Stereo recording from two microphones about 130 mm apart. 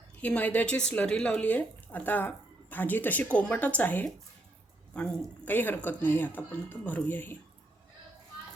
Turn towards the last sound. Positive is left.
turn(degrees=15)  # may be behind; listen again after turning